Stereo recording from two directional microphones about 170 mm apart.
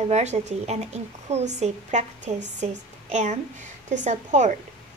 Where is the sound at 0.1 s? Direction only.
40° right (ahead or behind).